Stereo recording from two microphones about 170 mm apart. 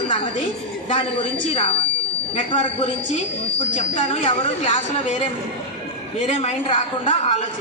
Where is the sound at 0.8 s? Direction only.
30° left (ahead or behind).